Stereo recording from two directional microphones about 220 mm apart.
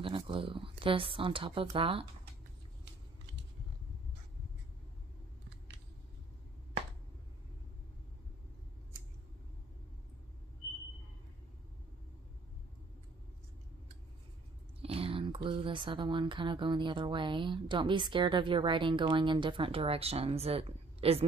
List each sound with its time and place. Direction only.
0.0 s speech: 25° right (ahead or behind)
14.8 s speech: 25° right (ahead or behind)